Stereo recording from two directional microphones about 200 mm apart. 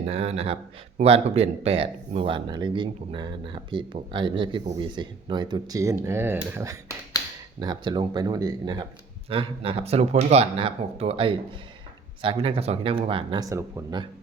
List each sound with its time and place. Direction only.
0.1 s speech: 30° right (ahead or behind)